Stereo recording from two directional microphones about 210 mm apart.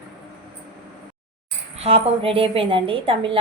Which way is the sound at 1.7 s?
30° right (ahead or behind).